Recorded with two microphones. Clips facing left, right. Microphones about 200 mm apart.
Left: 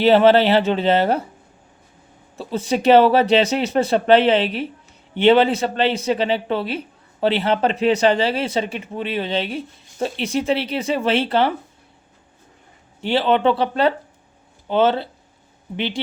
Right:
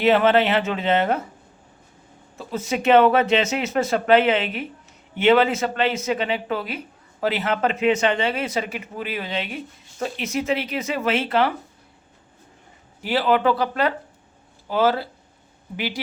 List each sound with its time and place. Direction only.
0.0 s speech: 30° left (ahead or behind)
2.4 s speech: 30° left (ahead or behind)
13.0 s speech: 30° left (ahead or behind)